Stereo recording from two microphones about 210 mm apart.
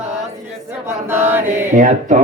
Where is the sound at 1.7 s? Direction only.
35° right (ahead or behind).